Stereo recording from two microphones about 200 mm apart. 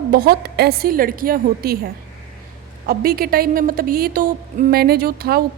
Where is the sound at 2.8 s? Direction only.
50° right (ahead or behind).